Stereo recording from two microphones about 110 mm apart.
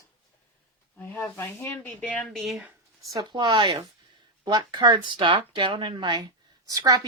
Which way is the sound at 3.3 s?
45° right (ahead or behind).